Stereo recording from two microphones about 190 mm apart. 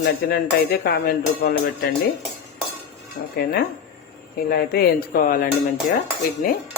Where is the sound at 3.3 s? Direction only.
55° left (ahead or behind).